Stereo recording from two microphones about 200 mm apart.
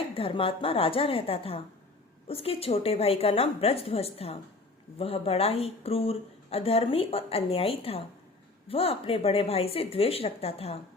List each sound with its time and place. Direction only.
0.1 s speech: 25° left (ahead or behind)